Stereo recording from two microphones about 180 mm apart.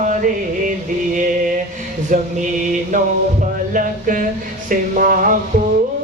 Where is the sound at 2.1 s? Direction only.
45° right (ahead or behind).